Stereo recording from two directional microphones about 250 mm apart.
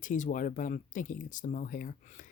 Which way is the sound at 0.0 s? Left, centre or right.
Left.